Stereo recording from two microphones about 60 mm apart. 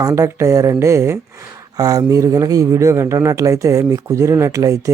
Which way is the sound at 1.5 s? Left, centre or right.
Right.